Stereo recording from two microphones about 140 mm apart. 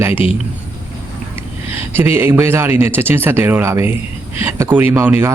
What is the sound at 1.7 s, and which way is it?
Speech, 15° right (ahead or behind).